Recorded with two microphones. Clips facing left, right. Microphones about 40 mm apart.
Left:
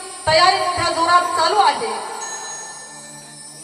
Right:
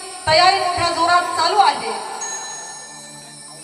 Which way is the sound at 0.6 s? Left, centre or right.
Centre.